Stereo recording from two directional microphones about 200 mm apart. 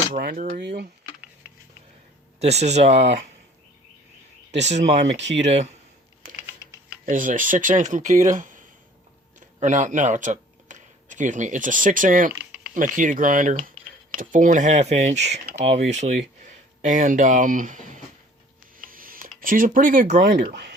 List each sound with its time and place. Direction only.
0.2 s speech: 45° right (ahead or behind)
0.6 s speech: 55° right (ahead or behind)
2.4 s speech: 30° right (ahead or behind)
4.7 s speech: 35° right (ahead or behind)
5.0 s speech: 65° right (ahead or behind)
7.0 s speech: 40° right (ahead or behind)